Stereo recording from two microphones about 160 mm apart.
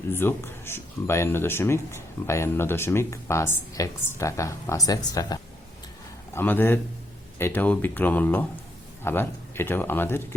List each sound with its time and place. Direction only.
0.1 s speech: 15° left (ahead or behind)
6.3 s speech: 10° left (ahead or behind)